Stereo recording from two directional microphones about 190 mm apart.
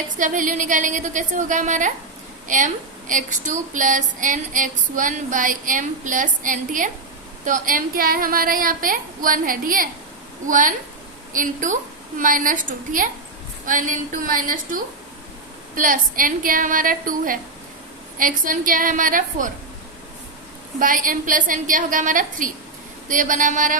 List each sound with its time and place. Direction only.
0.2 s a woman's voice: 40° right (ahead or behind)
20.7 s speech: 45° right (ahead or behind)